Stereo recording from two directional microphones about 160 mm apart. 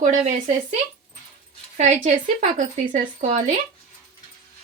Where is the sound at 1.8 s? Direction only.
45° right (ahead or behind).